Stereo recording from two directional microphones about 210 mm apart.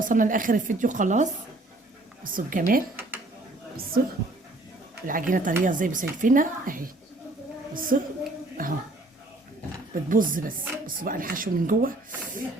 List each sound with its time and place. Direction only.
0.0 s speech: 40° right (ahead or behind)
5.0 s speech: 40° right (ahead or behind)
9.9 s speech: 40° right (ahead or behind)